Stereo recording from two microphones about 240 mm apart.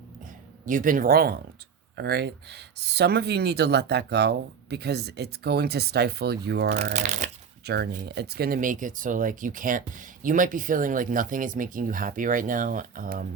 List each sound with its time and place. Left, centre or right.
0.6 s speech: right
6.7 s speech: right
7.6 s speech: right